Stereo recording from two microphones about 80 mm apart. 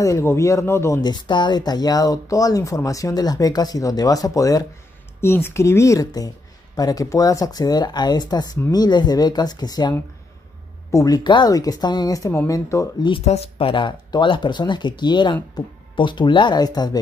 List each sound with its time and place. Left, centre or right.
0.0 s speech: left
1.0 s speech: left
5.2 s speech: left
10.9 s speech: left
11.1 s speech: left
11.5 s speech: left
13.7 s speech: left
15.5 s speech: left